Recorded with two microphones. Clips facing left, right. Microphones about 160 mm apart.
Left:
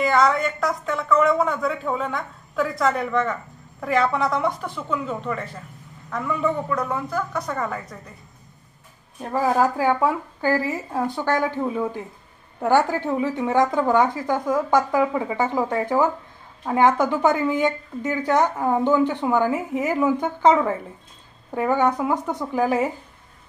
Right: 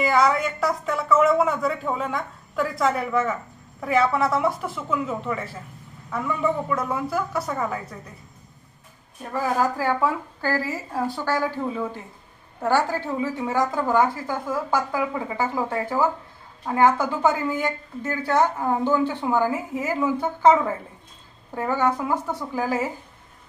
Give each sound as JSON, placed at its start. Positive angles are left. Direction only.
{"t": 0.0, "sound": "a woman's voice", "side_deg": -5}
{"t": 9.3, "sound": "a woman's voice", "side_deg": 25}
{"t": 21.5, "sound": "a woman's voice", "side_deg": 15}